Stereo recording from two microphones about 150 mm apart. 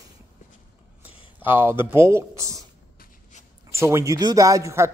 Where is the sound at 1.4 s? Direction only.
15° right (ahead or behind).